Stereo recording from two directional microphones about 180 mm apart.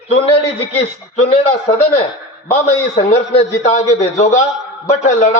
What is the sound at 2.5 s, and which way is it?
A man's voice, 35° left (ahead or behind).